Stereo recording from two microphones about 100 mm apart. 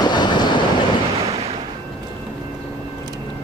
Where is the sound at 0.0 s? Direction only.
45° left (ahead or behind).